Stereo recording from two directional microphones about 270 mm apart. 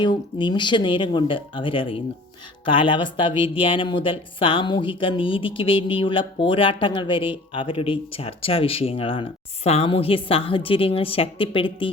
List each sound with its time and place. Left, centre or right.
0.0 s speech: centre